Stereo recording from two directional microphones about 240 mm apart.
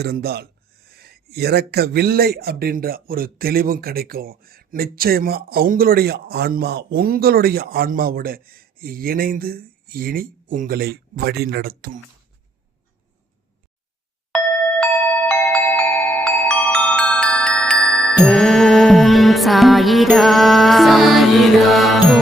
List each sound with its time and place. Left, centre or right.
0.0 s speech: right
15.3 s glockenspiel: centre
18.2 s music: centre